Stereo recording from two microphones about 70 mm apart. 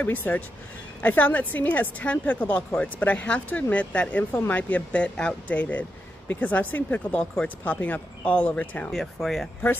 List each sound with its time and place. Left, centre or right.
0.0 s speech: left
8.9 s speech: centre